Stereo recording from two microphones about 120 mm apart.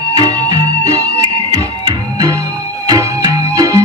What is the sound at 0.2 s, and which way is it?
Music, 30° right (ahead or behind).